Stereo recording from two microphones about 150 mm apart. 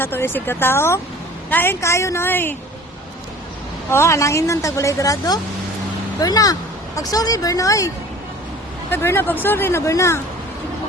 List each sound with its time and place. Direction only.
0.0 s speech: 15° left (ahead or behind)
3.8 s a woman's voice: 20° left (ahead or behind)
8.9 s speech: 15° left (ahead or behind)